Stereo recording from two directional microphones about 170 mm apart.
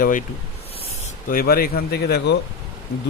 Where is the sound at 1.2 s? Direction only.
60° left (ahead or behind).